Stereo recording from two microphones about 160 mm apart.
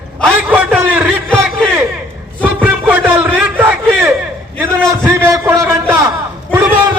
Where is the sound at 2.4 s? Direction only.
10° right (ahead or behind).